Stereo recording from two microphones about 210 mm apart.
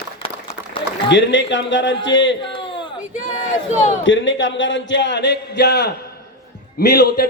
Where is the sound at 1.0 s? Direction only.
60° left (ahead or behind).